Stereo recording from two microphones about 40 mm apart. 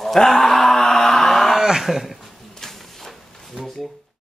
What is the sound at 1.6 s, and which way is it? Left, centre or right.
Speech, centre.